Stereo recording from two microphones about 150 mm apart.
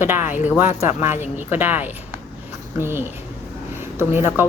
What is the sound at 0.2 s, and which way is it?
Speech, 55° left (ahead or behind).